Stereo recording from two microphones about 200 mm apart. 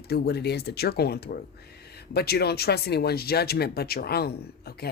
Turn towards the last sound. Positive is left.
turn(degrees=50)  # may be behind; listen again after turning